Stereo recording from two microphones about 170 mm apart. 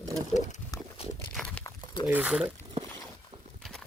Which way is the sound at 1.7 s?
25° left (ahead or behind).